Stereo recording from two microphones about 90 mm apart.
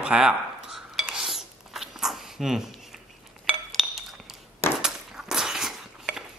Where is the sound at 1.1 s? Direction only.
5° right (ahead or behind).